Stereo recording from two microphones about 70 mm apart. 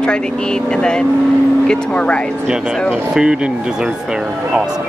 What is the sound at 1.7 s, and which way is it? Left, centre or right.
Speech, centre.